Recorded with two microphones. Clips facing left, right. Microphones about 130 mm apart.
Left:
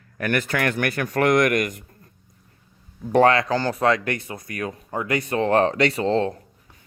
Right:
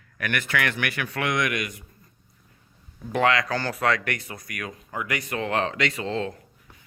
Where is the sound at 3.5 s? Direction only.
20° left (ahead or behind).